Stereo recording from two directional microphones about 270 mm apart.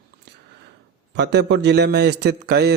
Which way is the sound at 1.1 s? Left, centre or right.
Right.